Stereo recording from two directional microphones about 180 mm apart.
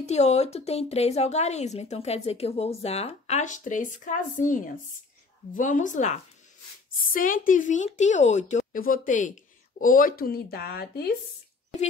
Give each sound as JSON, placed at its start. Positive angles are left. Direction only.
{"t": 0.0, "sound": "a woman's voice", "side_deg": 40}